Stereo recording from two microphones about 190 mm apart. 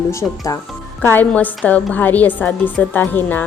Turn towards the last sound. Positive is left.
turn(degrees=10)  # may be behind; listen again after turning